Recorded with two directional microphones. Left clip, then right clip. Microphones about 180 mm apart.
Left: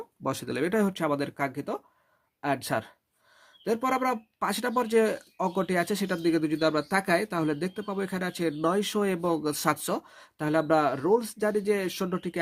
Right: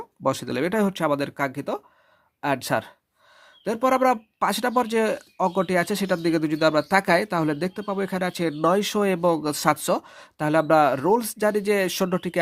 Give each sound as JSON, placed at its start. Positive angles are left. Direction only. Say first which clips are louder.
{"t": 0.2, "sound": "speech", "louder": "right 6 dB", "side_deg": -25}